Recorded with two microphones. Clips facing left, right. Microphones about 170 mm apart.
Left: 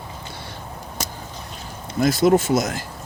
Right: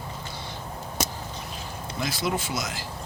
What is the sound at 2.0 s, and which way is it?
Speech, 45° left (ahead or behind).